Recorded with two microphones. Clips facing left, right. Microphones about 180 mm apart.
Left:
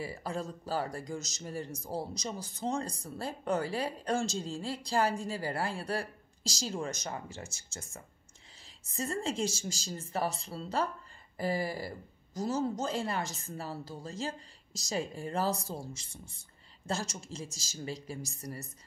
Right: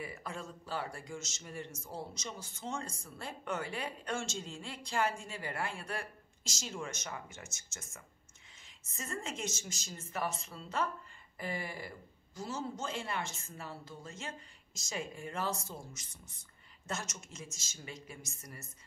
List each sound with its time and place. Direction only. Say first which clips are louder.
0.0 s a man's voice: left 6 dB; 35° left (ahead or behind)